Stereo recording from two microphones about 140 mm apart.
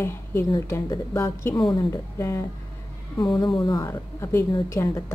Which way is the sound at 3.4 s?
30° left (ahead or behind).